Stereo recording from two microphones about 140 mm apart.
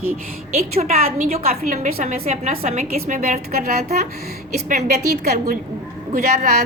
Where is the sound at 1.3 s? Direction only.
80° right.